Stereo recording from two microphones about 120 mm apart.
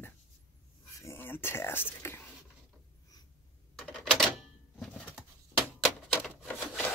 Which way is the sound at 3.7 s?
10° left (ahead or behind).